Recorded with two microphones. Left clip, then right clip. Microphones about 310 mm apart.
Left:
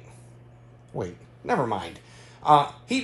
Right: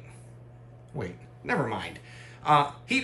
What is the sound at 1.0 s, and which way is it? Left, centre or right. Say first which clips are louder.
Speech: left 4 dB; centre.